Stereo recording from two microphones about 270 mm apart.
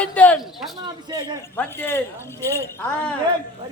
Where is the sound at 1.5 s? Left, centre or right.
Centre.